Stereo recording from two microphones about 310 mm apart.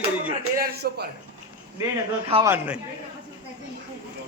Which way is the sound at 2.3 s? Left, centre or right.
Centre.